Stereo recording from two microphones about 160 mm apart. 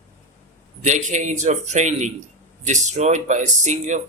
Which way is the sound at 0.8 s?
50° right (ahead or behind).